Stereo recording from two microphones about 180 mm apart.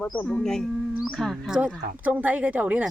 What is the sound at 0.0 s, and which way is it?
A woman's voice, 5° left (ahead or behind).